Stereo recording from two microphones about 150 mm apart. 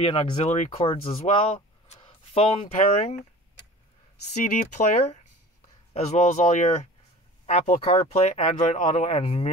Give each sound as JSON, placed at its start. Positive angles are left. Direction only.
{"t": 0.0, "sound": "speech", "side_deg": 40}
{"t": 4.3, "sound": "speech", "side_deg": 55}